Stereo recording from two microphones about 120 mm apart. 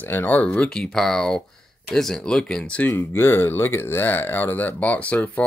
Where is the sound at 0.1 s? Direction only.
15° left (ahead or behind).